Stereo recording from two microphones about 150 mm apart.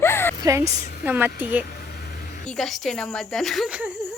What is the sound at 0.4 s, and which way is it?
A woman's voice, 20° right (ahead or behind).